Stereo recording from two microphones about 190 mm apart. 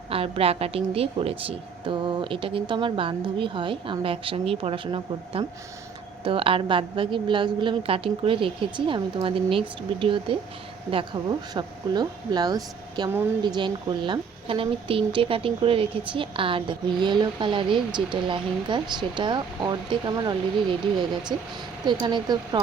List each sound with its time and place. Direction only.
0.1 s a woman's voice: 30° right (ahead or behind)
21.8 s a woman's voice: 25° right (ahead or behind)